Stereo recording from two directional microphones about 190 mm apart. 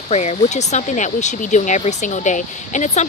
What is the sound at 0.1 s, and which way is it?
Speech, 35° left (ahead or behind).